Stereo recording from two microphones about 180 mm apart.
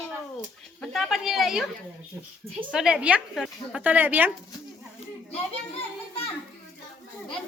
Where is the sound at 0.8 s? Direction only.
Centre (ahead or behind).